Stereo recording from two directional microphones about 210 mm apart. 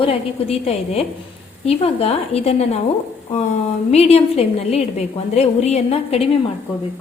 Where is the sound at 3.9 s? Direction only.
30° left (ahead or behind).